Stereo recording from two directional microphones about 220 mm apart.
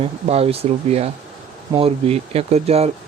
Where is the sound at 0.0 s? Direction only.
25° right (ahead or behind).